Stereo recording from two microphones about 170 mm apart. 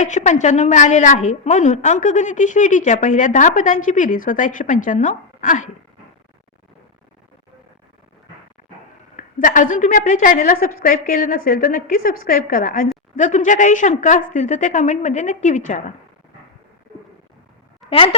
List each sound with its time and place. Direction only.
0.0 s a woman's voice: 45° left (ahead or behind)
9.1 s a woman's voice: 50° left (ahead or behind)
17.8 s speech: 35° left (ahead or behind)